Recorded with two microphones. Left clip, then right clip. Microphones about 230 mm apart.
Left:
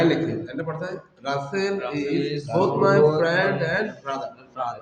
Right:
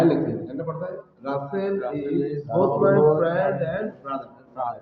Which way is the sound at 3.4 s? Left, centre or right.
Left.